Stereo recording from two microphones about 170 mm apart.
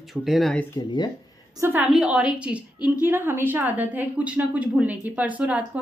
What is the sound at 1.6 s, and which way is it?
A woman's voice, 10° right (ahead or behind).